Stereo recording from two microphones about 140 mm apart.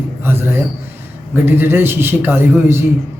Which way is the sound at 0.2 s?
15° right (ahead or behind).